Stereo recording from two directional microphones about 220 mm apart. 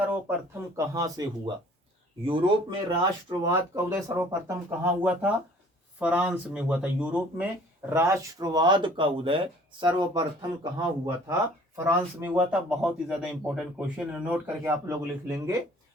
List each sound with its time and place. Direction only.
0.1 s speech: 10° right (ahead or behind)
2.2 s speech: 20° right (ahead or behind)